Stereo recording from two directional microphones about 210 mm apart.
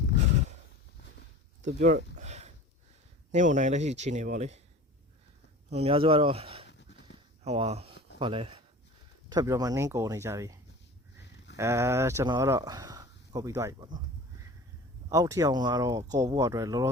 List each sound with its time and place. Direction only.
1.8 s a sound: 40° right (ahead or behind)
3.3 s speech: 35° right (ahead or behind)
5.7 s speech: 25° right (ahead or behind)
6.7 s pant: 55° left (ahead or behind)
7.4 s speech: 30° right (ahead or behind)
15.1 s speech: 15° right (ahead or behind)